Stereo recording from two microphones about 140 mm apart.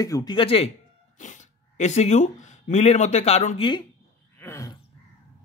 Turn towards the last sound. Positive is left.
turn(degrees=20)  # may be behind; listen again after turning